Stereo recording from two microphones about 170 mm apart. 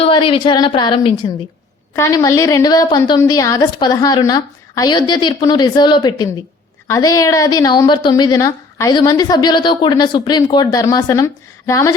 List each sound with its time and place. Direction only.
0.0 s a woman's voice: 30° left (ahead or behind)
2.0 s a woman's voice: 20° left (ahead or behind)